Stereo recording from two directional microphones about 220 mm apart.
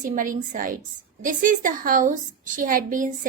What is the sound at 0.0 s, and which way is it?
A woman's voice, 35° right (ahead or behind).